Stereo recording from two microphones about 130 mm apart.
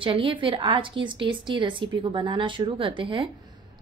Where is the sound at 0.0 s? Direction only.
40° right (ahead or behind).